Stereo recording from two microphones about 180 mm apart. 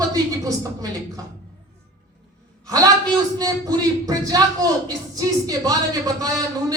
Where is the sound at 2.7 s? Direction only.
20° right (ahead or behind).